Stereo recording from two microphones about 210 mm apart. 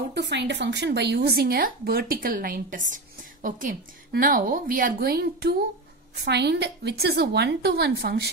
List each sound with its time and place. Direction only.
0.1 s a woman's voice: 55° right (ahead or behind)